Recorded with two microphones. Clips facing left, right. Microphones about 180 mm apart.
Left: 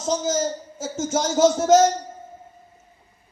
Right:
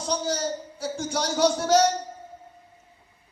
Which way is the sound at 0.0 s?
45° left (ahead or behind).